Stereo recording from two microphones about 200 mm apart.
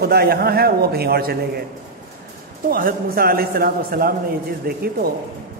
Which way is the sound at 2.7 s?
45° right (ahead or behind).